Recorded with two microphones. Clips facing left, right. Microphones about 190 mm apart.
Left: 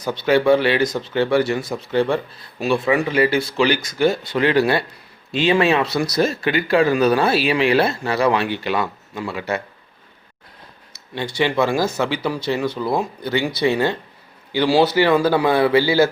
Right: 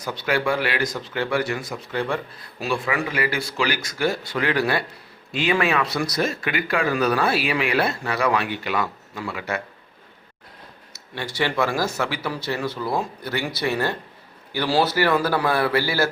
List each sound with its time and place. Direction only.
0.0 s speech: 25° left (ahead or behind)
11.1 s speech: 20° left (ahead or behind)